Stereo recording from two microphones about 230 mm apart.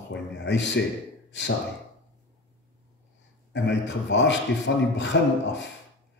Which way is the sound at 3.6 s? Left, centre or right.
Left.